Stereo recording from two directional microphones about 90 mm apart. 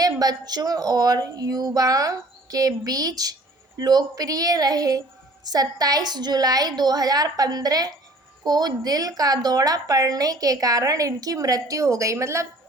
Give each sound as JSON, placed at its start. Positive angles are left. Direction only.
{"t": 0.0, "sound": "a woman's voice", "side_deg": -45}